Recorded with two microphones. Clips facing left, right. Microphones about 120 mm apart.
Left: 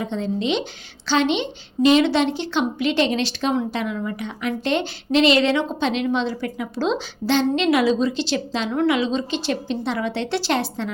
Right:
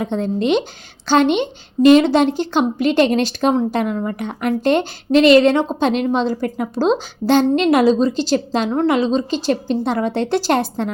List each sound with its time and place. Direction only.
0.0 s a woman's voice: 50° right (ahead or behind)